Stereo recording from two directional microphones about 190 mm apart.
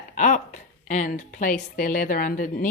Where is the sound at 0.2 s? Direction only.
40° left (ahead or behind).